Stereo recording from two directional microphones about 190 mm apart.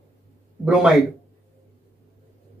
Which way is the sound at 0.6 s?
5° right (ahead or behind).